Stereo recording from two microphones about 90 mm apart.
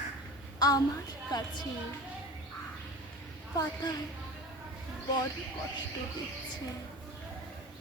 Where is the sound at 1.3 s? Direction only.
45° left (ahead or behind).